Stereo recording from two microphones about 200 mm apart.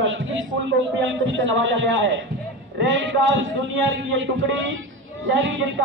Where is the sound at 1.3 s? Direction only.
70° right (ahead or behind).